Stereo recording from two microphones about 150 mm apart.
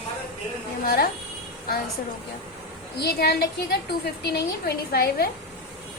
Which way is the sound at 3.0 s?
90° left.